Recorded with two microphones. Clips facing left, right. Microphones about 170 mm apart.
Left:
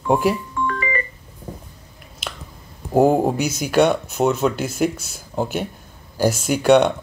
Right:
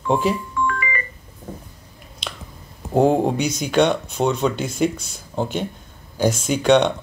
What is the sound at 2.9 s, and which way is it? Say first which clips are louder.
Speech: left 1 dB; 5° left (ahead or behind).